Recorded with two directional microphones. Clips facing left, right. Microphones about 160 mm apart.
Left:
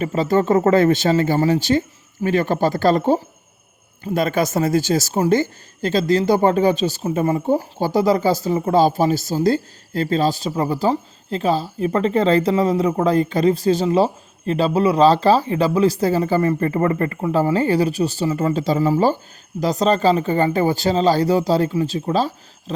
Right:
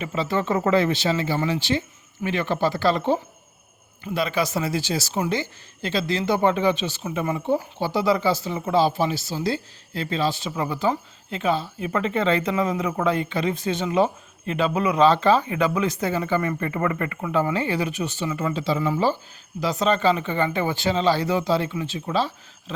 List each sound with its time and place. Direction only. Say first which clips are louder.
0.0 s speech: left 7 dB; 45° left (ahead or behind)